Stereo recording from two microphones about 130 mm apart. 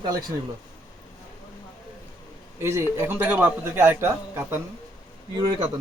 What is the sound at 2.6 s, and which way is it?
A man's voice, 20° right (ahead or behind).